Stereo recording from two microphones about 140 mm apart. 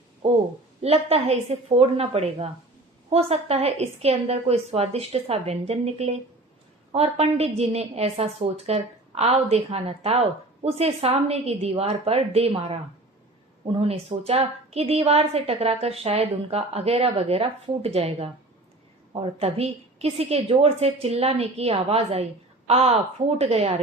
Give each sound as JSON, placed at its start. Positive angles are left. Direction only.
{"t": 0.2, "sound": "a woman's voice", "side_deg": -45}
{"t": 13.7, "sound": "a woman's voice", "side_deg": -45}
{"t": 19.4, "sound": "a woman's voice", "side_deg": -45}